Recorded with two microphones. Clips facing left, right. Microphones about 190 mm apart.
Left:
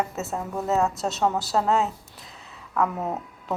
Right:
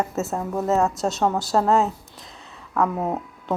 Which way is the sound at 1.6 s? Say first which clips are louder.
Right 3 dB; 35° right (ahead or behind).